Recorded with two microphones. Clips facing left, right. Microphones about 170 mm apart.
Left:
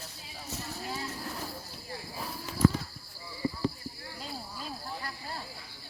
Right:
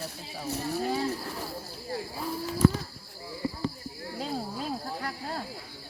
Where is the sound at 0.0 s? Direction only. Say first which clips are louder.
Right 9 dB; 60° right (ahead or behind).